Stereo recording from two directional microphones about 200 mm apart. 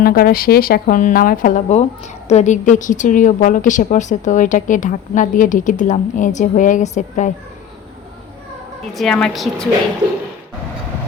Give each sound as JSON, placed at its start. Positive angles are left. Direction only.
{"t": 0.0, "sound": "a woman's voice", "side_deg": 45}
{"t": 9.0, "sound": "a woman's voice", "side_deg": 5}